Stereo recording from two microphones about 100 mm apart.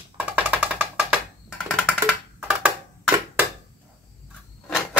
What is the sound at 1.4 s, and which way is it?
Music, 10° left (ahead or behind).